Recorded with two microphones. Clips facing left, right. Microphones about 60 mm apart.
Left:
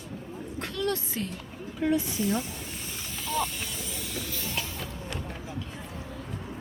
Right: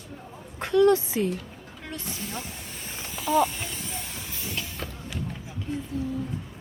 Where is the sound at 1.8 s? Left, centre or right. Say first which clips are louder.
Left 10 dB; centre.